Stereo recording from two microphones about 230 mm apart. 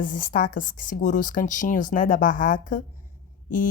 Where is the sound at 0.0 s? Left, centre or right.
Left.